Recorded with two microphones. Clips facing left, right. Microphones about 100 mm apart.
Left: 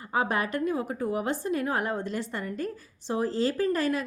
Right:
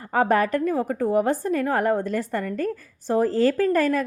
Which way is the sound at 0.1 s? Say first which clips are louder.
Right 7 dB; 45° right (ahead or behind).